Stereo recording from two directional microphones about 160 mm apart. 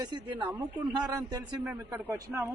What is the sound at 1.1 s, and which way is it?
A man's voice, 20° right (ahead or behind).